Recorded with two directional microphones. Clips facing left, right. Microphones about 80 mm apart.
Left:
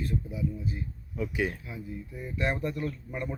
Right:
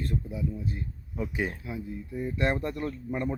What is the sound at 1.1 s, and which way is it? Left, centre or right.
Speech, right.